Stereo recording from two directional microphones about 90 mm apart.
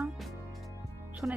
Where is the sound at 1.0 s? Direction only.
10° right (ahead or behind).